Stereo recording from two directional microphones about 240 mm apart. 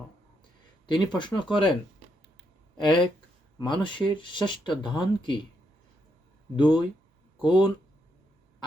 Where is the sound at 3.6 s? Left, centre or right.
Centre.